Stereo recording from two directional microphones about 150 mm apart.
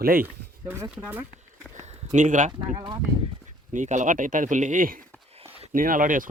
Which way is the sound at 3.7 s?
55° right (ahead or behind).